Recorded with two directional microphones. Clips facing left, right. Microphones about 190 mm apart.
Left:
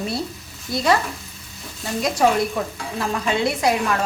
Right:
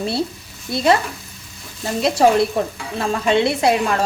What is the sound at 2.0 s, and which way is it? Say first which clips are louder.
A woman's voice: right 4 dB; 30° right (ahead or behind).